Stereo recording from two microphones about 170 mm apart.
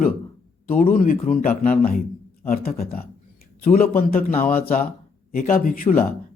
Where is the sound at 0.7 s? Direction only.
55° left (ahead or behind).